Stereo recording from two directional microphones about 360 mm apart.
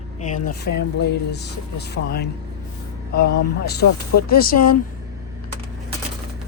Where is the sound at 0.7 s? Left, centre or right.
Left.